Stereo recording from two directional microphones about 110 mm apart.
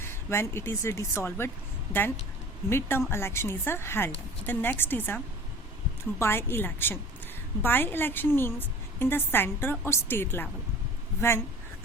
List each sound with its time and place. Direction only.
0.0 s a woman's voice: 25° left (ahead or behind)